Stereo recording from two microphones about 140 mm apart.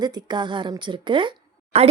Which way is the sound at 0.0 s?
30° right (ahead or behind).